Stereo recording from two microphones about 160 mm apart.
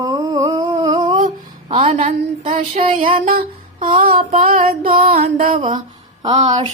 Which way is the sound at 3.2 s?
55° right (ahead or behind).